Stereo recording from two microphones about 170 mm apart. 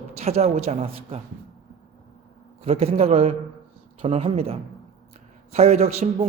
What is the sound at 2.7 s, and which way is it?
A man's voice, 35° right (ahead or behind).